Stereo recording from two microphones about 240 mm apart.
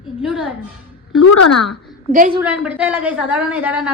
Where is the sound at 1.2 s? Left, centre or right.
Left.